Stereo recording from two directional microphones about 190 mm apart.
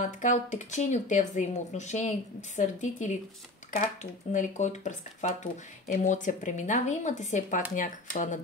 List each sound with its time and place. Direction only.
0.0 s speech: 40° left (ahead or behind)